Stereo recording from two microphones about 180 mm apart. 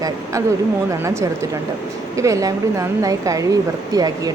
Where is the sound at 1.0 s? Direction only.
15° right (ahead or behind).